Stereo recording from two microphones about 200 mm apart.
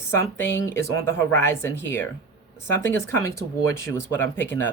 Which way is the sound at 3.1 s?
15° left (ahead or behind).